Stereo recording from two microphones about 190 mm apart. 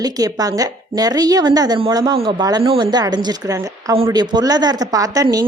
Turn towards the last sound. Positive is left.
turn(degrees=-20)  # may be behind; listen again after turning